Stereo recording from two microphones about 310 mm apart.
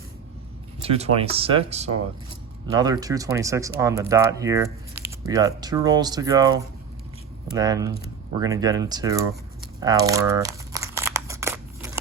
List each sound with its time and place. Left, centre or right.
0.8 s speech: centre
9.8 s crumpling: centre